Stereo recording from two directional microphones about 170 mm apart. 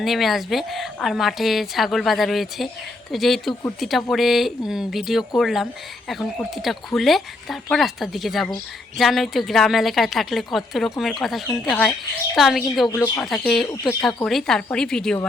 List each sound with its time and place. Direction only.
0.0 s a woman's voice: centre (ahead or behind)
12.9 s speech: 15° left (ahead or behind)
13.2 s a woman's voice: centre (ahead or behind)